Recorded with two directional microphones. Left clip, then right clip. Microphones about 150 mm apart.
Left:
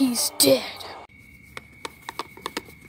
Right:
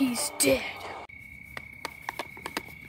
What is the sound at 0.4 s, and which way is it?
Speech, 25° left (ahead or behind).